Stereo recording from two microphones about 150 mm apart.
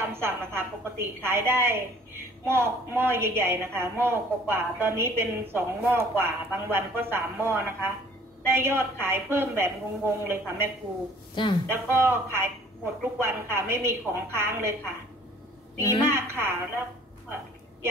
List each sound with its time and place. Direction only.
0.0 s a woman's voice: 15° right (ahead or behind)
11.4 s speech: 30° left (ahead or behind)
11.7 s a woman's voice: 15° right (ahead or behind)
16.0 s a woman's voice: 15° right (ahead or behind)